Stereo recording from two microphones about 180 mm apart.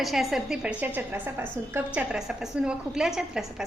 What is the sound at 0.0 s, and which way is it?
A woman's voice, centre (ahead or behind).